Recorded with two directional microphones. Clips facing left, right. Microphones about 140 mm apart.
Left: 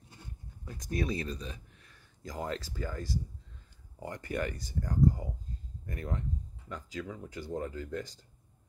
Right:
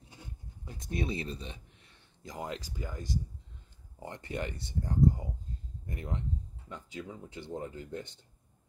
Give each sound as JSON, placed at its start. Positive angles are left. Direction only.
{"t": 0.7, "sound": "speech", "side_deg": -25}